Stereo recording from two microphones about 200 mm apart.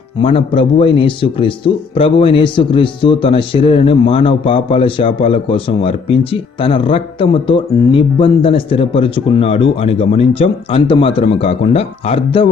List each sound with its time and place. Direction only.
0.2 s speech: 25° left (ahead or behind)